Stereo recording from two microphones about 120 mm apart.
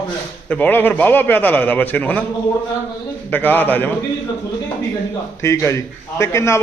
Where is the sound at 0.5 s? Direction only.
15° left (ahead or behind).